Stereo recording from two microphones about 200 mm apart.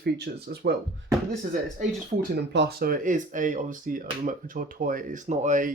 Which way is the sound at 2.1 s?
35° right (ahead or behind).